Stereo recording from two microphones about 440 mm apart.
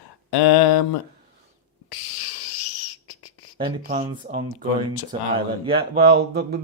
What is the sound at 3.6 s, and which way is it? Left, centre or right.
Speech, centre.